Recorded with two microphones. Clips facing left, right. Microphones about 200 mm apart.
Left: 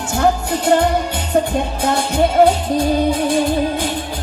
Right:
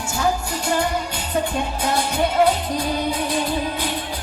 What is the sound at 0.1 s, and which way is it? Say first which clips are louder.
Music: left 6 dB; 60° left (ahead or behind).